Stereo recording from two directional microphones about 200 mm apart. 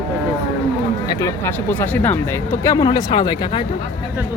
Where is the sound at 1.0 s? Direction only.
20° left (ahead or behind).